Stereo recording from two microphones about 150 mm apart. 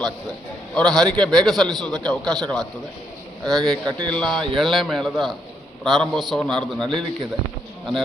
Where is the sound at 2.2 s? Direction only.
25° right (ahead or behind).